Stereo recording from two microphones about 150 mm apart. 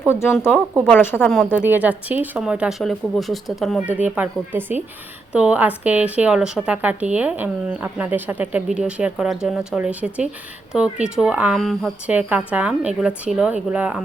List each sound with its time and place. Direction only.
0.1 s speech: 15° left (ahead or behind)
1.1 s speech: centre (ahead or behind)
12.0 s speech: 10° right (ahead or behind)